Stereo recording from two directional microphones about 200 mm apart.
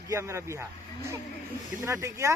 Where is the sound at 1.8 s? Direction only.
15° right (ahead or behind).